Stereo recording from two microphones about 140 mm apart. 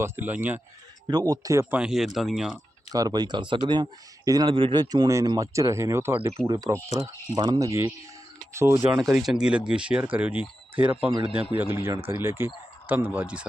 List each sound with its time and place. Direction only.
0.0 s speech: 15° right (ahead or behind)
1.0 s speech: 30° right (ahead or behind)
1.7 s speech: 5° right (ahead or behind)
2.9 s speech: 30° right (ahead or behind)
6.5 s speech: 25° right (ahead or behind)
9.2 s speech: 5° right (ahead or behind)
11.1 s speech: 40° right (ahead or behind)
11.5 s speech: 15° right (ahead or behind)